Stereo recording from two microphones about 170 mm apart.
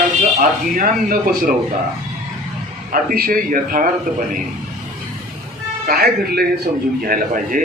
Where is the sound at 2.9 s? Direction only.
60° right (ahead or behind).